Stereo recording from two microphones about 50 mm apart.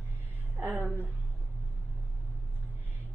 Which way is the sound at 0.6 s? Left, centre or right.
Right.